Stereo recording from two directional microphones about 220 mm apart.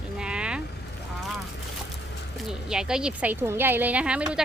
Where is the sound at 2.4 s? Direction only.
5° right (ahead or behind).